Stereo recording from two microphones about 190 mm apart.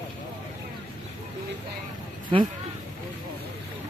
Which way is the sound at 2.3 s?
25° right (ahead or behind).